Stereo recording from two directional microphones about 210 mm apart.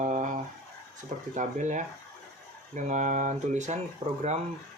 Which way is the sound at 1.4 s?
35° right (ahead or behind).